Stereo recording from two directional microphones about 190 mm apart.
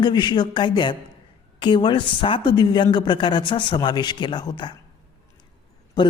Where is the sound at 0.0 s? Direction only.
25° left (ahead or behind).